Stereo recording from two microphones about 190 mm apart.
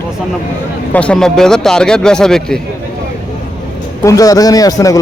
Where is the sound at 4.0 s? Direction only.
15° left (ahead or behind).